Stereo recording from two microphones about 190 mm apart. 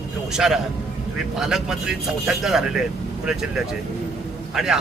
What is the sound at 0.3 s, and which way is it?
Speech, 5° right (ahead or behind).